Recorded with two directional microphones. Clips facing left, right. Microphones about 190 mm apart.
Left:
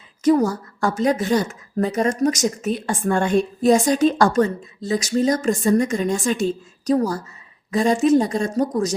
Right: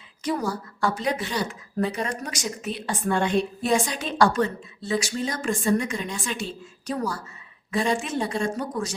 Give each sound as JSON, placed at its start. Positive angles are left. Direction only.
{"t": 0.3, "sound": "a woman's voice", "side_deg": 45}